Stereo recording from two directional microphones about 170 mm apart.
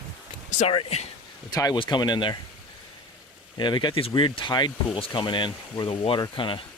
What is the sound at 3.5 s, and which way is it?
Speech, 25° left (ahead or behind).